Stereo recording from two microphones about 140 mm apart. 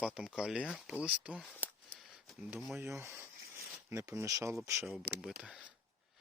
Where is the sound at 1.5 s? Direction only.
10° left (ahead or behind).